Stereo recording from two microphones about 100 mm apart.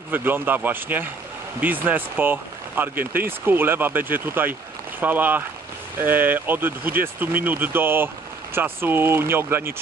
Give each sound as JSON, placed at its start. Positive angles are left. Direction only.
{"t": 0.1, "sound": "speech", "side_deg": -20}